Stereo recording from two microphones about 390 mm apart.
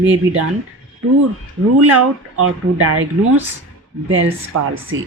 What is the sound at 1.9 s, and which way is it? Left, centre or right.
Speech, right.